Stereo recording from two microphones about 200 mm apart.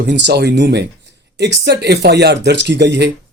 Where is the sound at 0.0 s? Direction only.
60° right (ahead or behind).